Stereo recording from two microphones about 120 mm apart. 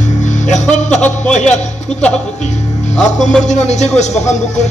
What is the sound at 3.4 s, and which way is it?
Speech, 75° left (ahead or behind).